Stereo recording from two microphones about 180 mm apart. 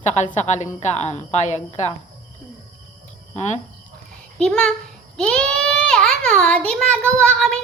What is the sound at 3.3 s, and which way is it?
Speech, 40° left (ahead or behind).